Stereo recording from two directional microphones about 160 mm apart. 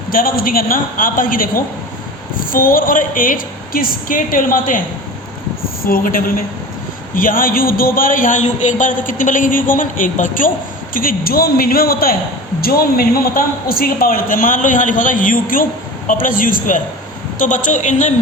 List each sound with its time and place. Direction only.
0.1 s a man's voice: 65° left (ahead or behind)
5.8 s a man's voice: 65° left (ahead or behind)